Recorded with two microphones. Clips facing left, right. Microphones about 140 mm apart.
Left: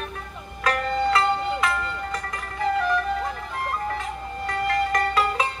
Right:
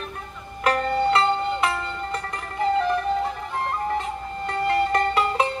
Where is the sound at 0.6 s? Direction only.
30° right (ahead or behind).